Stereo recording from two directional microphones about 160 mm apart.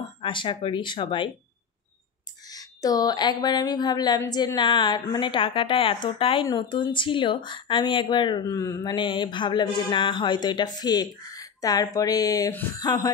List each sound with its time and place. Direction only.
0.2 s speech: 30° left (ahead or behind)
2.5 s a woman's voice: 25° left (ahead or behind)